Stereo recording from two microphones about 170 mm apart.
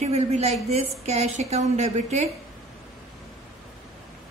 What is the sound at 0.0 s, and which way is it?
A woman's voice, 40° right (ahead or behind).